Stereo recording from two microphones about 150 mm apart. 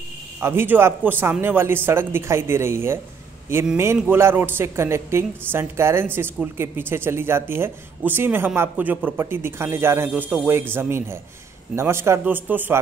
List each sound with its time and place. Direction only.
0.4 s a woman's voice: 15° right (ahead or behind)